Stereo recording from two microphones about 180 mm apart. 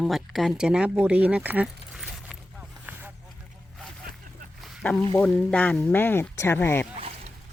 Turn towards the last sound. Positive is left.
turn(degrees=-35)  # may be behind; listen again after turning